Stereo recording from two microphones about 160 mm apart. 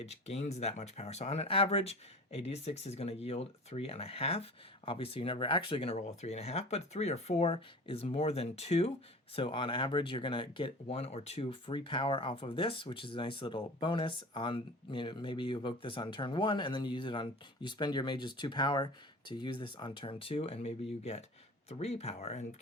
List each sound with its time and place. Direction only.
0.0 s speech: 40° left (ahead or behind)